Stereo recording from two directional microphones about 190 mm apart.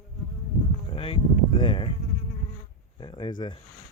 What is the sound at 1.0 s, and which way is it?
Speech, 30° left (ahead or behind).